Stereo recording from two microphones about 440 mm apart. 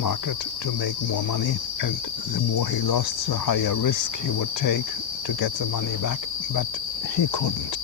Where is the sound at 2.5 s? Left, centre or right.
Left.